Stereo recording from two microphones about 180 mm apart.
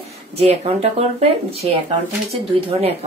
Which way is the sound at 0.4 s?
35° right (ahead or behind).